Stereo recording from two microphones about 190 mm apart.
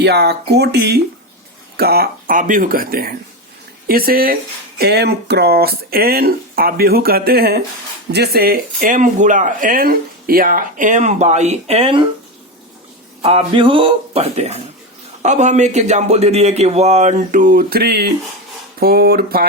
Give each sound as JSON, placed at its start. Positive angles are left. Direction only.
{"t": 0.0, "sound": "speech", "side_deg": -60}
{"t": 13.2, "sound": "a man's voice", "side_deg": -25}